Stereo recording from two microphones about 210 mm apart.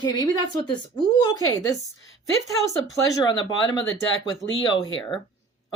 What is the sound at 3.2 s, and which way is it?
Speech, 20° left (ahead or behind).